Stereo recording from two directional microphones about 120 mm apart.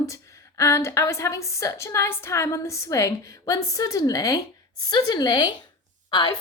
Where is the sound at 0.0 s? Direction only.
25° left (ahead or behind).